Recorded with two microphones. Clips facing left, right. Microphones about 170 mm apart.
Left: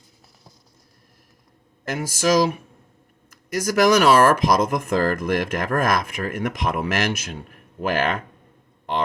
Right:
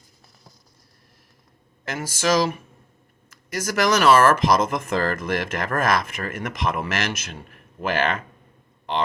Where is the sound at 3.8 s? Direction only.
50° left (ahead or behind).